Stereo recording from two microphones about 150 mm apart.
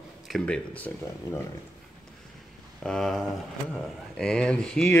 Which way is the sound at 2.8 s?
5° left (ahead or behind).